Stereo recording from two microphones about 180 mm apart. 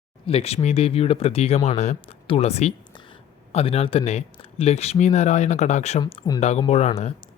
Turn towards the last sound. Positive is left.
turn(degrees=35)  # may be behind; listen again after turning